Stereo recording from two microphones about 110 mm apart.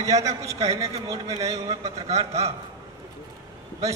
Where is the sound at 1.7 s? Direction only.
75° right (ahead or behind).